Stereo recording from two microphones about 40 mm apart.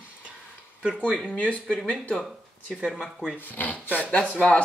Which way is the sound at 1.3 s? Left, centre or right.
Left.